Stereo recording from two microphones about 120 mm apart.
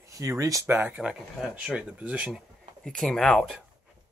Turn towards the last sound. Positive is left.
turn(degrees=5)  # may be behind; listen again after turning